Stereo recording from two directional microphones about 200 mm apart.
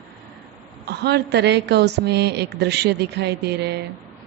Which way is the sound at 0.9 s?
55° right (ahead or behind).